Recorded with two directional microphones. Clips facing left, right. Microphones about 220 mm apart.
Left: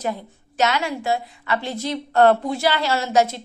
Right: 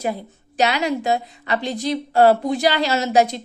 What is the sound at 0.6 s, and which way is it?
A woman's voice, 15° right (ahead or behind).